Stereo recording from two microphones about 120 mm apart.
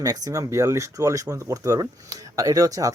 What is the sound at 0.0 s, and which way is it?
Speech, 30° right (ahead or behind).